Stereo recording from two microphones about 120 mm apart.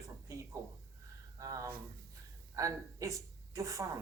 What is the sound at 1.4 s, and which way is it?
Speech, 25° right (ahead or behind).